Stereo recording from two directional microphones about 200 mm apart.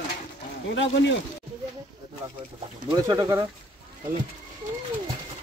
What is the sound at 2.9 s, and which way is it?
Speech, 15° right (ahead or behind).